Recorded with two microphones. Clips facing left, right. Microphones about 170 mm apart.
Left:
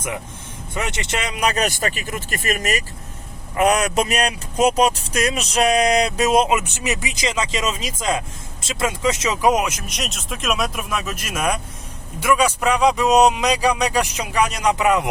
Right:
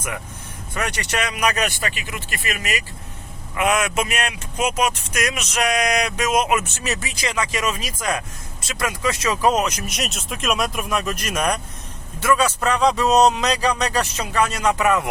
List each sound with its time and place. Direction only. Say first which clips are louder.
0.7 s speech: even; 20° left (ahead or behind)
6.5 s speech: left 1 dB; 20° left (ahead or behind)
9.7 s speech: right 2 dB; centre (ahead or behind); by 15.1 s 20° left (ahead or behind)